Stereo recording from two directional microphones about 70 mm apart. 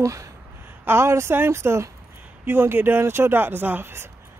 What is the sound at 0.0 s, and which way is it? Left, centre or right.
A woman's voice, right.